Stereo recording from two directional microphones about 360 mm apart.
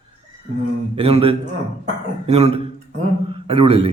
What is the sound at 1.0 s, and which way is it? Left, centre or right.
A man's voice, centre.